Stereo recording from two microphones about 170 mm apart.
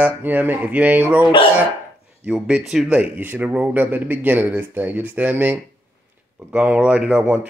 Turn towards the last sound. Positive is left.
turn(degrees=-10)  # may be behind; listen again after turning